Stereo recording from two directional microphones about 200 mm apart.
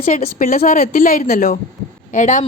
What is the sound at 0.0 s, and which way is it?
A woman's voice, 35° left (ahead or behind).